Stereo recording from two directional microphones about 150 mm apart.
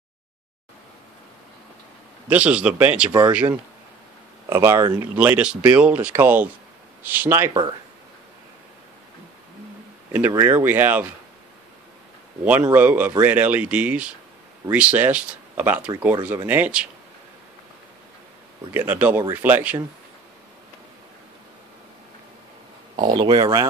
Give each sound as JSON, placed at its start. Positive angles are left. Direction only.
{"t": 2.2, "sound": "speech", "side_deg": -10}
{"t": 4.5, "sound": "speech", "side_deg": -20}
{"t": 5.1, "sound": "speech", "side_deg": -10}
{"t": 10.3, "sound": "speech", "side_deg": -15}
{"t": 12.7, "sound": "speech", "side_deg": -10}
{"t": 18.7, "sound": "speech", "side_deg": -10}
{"t": 22.9, "sound": "speech", "side_deg": -30}